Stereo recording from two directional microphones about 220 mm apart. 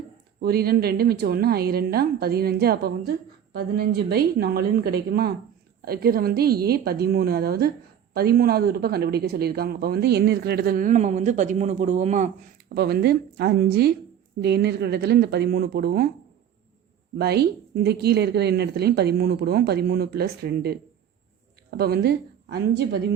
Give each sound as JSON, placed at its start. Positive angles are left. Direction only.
{"t": 0.4, "sound": "speech", "side_deg": -45}
{"t": 12.6, "sound": "speech", "side_deg": -45}
{"t": 17.2, "sound": "speech", "side_deg": -45}
{"t": 21.8, "sound": "a woman's voice", "side_deg": -45}